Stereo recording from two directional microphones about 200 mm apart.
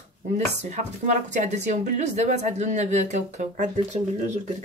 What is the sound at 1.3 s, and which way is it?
A woman's voice, 35° right (ahead or behind).